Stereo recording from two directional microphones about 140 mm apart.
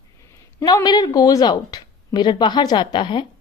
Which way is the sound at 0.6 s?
25° left (ahead or behind).